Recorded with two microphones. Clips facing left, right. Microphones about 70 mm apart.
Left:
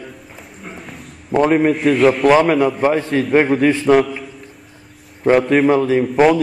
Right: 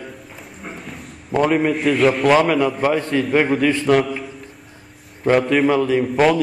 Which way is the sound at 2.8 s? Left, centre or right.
Centre.